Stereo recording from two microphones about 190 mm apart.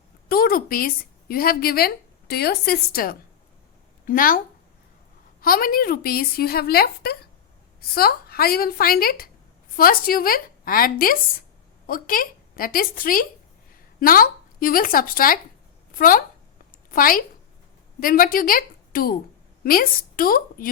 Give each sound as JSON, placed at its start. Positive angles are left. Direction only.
{"t": 0.3, "sound": "a woman's voice", "side_deg": 50}
{"t": 5.4, "sound": "a woman's voice", "side_deg": 50}